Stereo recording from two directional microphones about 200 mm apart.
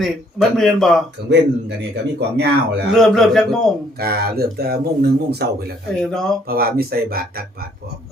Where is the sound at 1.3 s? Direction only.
55° right (ahead or behind).